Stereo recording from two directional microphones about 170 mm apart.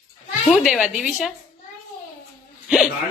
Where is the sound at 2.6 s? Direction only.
5° right (ahead or behind).